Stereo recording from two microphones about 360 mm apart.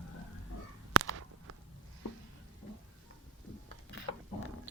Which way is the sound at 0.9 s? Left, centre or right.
Right.